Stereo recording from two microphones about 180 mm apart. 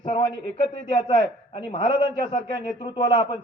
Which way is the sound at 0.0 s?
30° left (ahead or behind).